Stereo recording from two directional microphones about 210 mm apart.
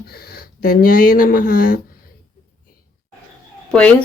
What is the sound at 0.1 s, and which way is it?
Speech, 45° left (ahead or behind).